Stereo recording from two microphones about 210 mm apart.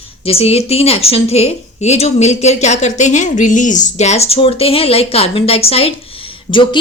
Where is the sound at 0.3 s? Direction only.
30° left (ahead or behind).